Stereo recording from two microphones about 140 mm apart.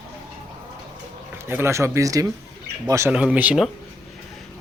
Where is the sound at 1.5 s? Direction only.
20° right (ahead or behind).